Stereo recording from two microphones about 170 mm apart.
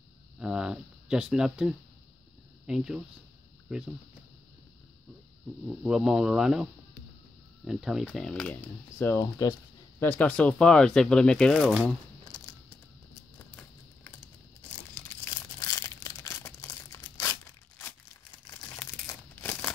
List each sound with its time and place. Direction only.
0.4 s speech: 5° right (ahead or behind)
5.7 s speech: 5° right (ahead or behind)
12.3 s a sound: 20° left (ahead or behind)
15.3 s crumpling: 20° left (ahead or behind)
18.5 s crumpling: 5° left (ahead or behind)